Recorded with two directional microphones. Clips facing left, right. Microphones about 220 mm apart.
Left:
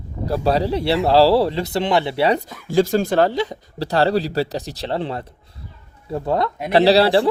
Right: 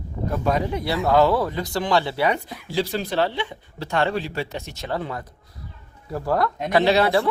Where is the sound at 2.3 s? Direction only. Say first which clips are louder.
Left 5 dB; 45° left (ahead or behind); by 6.4 s 25° left (ahead or behind).